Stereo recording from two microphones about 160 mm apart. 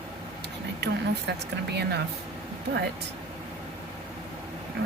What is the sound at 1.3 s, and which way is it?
Speech, 90° right.